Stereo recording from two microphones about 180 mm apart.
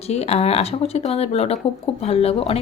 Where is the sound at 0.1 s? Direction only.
35° left (ahead or behind).